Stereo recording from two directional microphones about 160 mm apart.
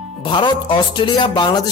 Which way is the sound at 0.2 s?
30° left (ahead or behind).